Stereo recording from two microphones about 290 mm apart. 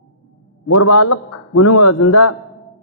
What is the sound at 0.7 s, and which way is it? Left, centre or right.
A man's voice, left.